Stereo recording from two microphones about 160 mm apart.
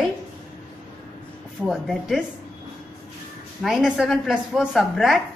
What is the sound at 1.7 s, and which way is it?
Speech, centre (ahead or behind).